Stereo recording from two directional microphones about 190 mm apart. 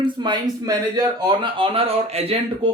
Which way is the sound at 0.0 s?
25° right (ahead or behind).